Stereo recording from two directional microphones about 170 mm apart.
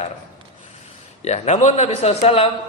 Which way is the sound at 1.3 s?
40° left (ahead or behind).